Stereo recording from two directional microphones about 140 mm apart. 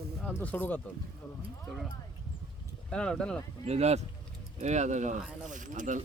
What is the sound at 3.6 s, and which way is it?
Speech, 50° right (ahead or behind).